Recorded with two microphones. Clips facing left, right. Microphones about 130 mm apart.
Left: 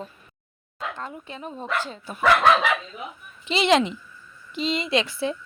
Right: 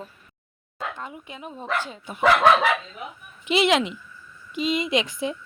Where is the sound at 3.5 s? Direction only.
5° right (ahead or behind).